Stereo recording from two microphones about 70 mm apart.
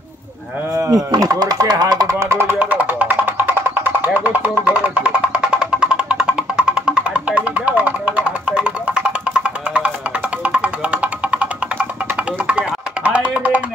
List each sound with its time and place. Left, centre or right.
0.9 s speech: right
2.1 s music: right